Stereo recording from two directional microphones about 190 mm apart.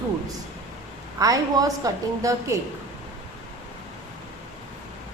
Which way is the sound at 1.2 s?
20° right (ahead or behind).